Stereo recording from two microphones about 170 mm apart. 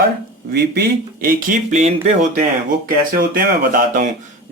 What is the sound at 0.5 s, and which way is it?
Speech, 70° right (ahead or behind).